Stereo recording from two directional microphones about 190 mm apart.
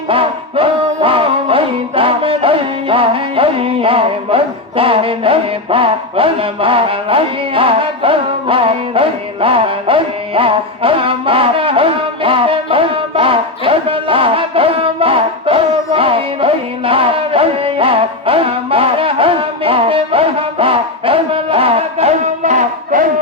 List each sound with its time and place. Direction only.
0.1 s music: 30° right (ahead or behind)